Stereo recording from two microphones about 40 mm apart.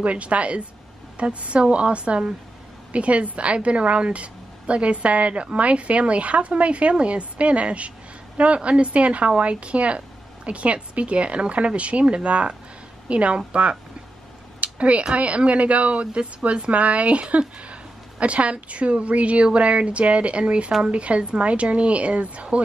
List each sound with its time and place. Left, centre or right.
0.0 s a woman's voice: right